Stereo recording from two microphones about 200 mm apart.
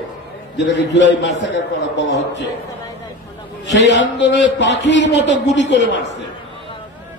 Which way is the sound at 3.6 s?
60° left (ahead or behind).